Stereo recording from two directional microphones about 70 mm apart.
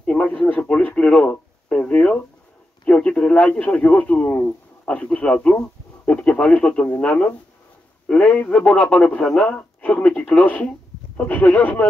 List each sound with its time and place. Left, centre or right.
0.0 s speech: centre